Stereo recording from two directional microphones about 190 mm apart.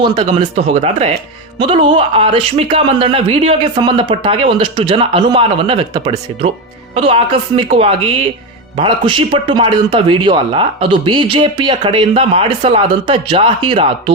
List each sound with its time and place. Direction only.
0.0 s speech: 25° right (ahead or behind)